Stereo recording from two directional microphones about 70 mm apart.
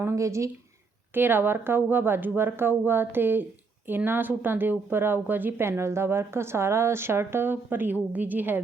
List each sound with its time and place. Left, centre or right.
0.2 s speech: right
1.1 s speech: right